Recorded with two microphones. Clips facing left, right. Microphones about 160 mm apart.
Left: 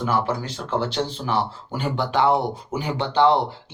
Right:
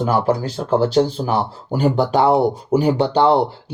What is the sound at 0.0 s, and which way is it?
Speech, 40° right (ahead or behind).